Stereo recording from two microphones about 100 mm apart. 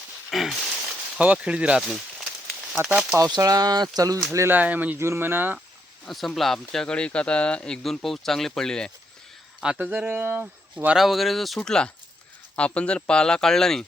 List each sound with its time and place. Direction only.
0.3 s a sound: centre (ahead or behind)
1.8 s snake: centre (ahead or behind)
2.8 s speech: 10° right (ahead or behind)
3.3 s speech: 40° right (ahead or behind)
4.3 s speech: 25° right (ahead or behind)
6.1 s speech: centre (ahead or behind)
9.7 s speech: 15° right (ahead or behind)
10.9 s speech: centre (ahead or behind)